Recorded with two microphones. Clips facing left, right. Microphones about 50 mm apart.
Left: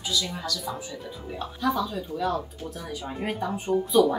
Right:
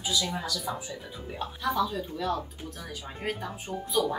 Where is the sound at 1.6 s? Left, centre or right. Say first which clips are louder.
Left 2 dB; centre.